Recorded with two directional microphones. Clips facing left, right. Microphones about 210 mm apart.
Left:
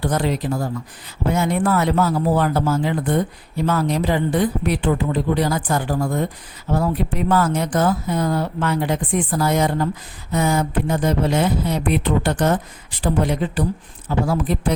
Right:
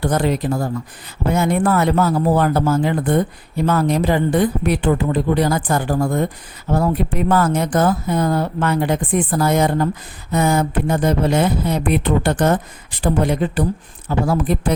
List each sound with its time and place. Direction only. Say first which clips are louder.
0.0 s speech: right 3 dB; 50° right (ahead or behind)